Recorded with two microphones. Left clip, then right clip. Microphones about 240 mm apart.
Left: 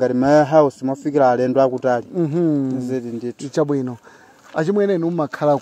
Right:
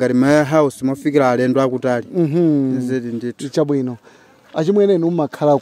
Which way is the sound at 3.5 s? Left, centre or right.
Centre.